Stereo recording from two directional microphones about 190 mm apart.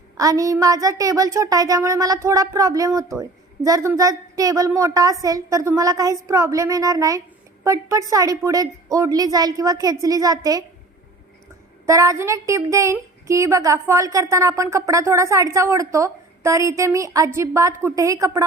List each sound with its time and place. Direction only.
0.2 s a woman's voice: 20° right (ahead or behind)
11.9 s a woman's voice: 15° right (ahead or behind)